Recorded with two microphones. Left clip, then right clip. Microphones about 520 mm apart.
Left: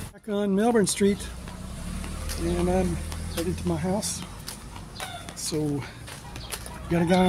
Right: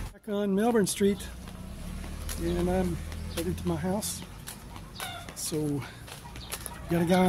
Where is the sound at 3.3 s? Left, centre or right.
Right.